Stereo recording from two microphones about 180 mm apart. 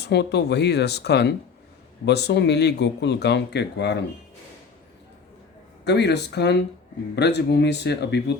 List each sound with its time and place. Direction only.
0.0 s speech: 70° left (ahead or behind)
5.8 s speech: 70° left (ahead or behind)